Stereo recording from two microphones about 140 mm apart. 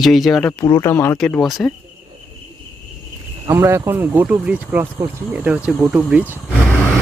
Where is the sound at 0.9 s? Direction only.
20° left (ahead or behind).